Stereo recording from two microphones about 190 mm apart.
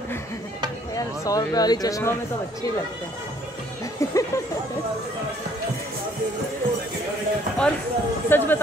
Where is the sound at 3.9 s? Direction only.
15° left (ahead or behind).